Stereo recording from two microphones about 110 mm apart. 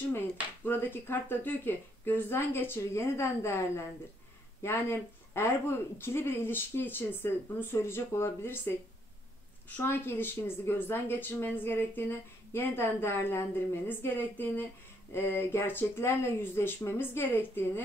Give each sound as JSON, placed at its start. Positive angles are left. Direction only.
{"t": 0.7, "sound": "speech", "side_deg": 20}